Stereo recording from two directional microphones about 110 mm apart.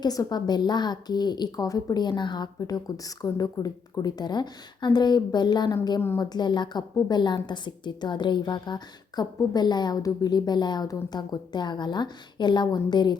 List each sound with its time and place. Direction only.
0.0 s a woman's voice: 35° left (ahead or behind)